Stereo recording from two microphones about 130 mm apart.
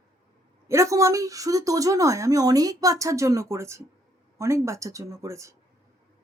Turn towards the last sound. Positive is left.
turn(degrees=-25)  # may be behind; listen again after turning